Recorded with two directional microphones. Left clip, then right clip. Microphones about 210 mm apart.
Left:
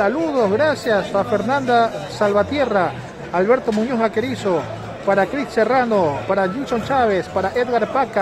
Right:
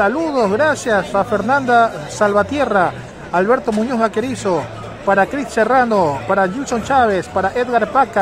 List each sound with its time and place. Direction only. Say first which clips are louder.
0.0 s speech: right 2 dB; 15° right (ahead or behind)